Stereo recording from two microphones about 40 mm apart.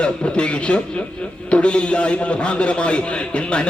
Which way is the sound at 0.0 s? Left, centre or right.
Left.